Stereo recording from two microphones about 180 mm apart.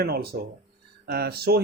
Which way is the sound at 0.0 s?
60° right (ahead or behind).